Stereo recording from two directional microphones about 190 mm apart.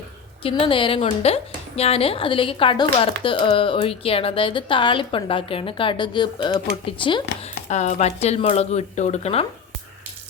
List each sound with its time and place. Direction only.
0.4 s a woman's voice: 30° left (ahead or behind)